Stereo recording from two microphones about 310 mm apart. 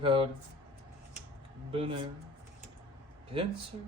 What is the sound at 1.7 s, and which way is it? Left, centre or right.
Speech, centre.